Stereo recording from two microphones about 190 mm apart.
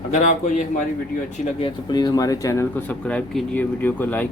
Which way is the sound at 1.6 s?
20° left (ahead or behind).